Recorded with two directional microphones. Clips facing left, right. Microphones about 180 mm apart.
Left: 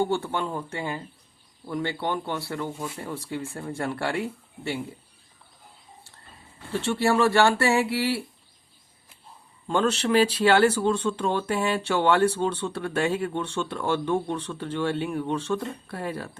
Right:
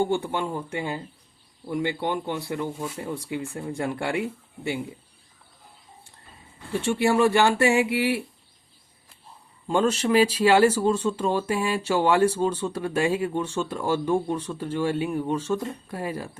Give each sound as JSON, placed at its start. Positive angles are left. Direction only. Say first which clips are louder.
{"t": 0.1, "sound": "speech", "louder": "right 1 dB", "side_deg": -15}
{"t": 6.8, "sound": "speech", "louder": "right 1 dB", "side_deg": -15}
{"t": 9.6, "sound": "speech", "louder": "right 1 dB", "side_deg": -10}